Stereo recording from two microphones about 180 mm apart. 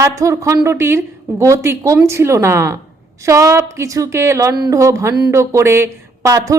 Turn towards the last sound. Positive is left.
turn(degrees=-15)  # may be behind; listen again after turning